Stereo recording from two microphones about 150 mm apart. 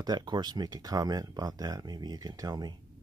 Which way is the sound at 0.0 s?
25° right (ahead or behind).